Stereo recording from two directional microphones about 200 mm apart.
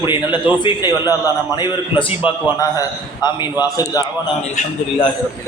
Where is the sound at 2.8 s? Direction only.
20° left (ahead or behind).